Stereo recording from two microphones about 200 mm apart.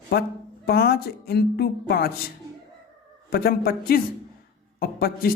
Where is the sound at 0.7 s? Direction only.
55° left (ahead or behind).